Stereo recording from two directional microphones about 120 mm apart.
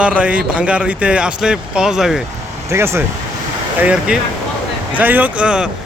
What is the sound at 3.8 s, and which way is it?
Speech, 10° right (ahead or behind).